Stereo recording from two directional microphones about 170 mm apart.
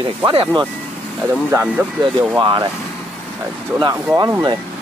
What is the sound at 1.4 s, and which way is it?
Speech, 10° right (ahead or behind).